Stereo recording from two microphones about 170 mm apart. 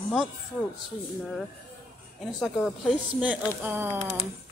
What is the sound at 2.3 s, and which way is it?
Speech, centre (ahead or behind).